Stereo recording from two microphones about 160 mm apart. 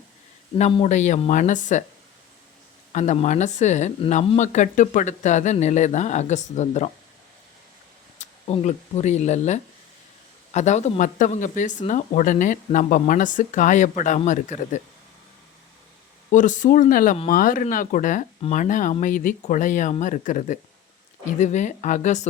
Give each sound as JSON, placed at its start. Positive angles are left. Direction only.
{"t": 0.5, "sound": "speech", "side_deg": 35}
{"t": 2.9, "sound": "speech", "side_deg": 45}
{"t": 8.2, "sound": "speech", "side_deg": 45}
{"t": 16.3, "sound": "speech", "side_deg": 50}